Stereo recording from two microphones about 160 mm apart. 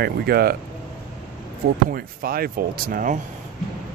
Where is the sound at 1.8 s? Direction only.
70° right (ahead or behind).